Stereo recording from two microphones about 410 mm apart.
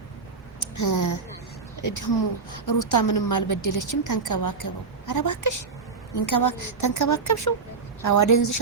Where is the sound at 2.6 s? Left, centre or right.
Left.